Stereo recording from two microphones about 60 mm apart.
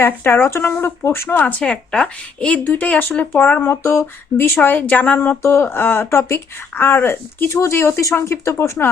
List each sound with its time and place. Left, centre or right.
0.0 s speech: left
1.9 s speech: centre
2.6 s speech: left
5.4 s speech: left
6.1 s speech: left